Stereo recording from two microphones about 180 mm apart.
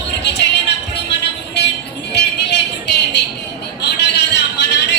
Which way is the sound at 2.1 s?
70° left (ahead or behind).